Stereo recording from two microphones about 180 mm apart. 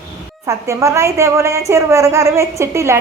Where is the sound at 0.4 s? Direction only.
15° right (ahead or behind).